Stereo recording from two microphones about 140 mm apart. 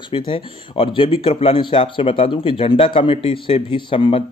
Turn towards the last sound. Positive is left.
turn(degrees=40)  # may be behind; listen again after turning